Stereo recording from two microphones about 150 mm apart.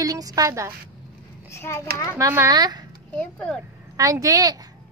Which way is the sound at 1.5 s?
15° left (ahead or behind).